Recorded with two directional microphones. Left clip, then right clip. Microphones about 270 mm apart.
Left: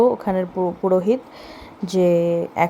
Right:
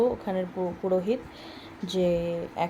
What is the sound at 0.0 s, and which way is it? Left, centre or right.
Speech, left.